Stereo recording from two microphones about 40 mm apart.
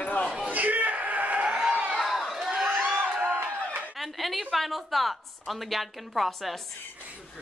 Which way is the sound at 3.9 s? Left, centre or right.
Centre.